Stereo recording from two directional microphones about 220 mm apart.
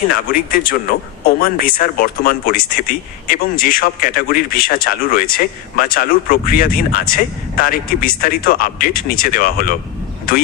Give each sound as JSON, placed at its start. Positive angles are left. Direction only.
{"t": 0.1, "sound": "speech", "side_deg": 40}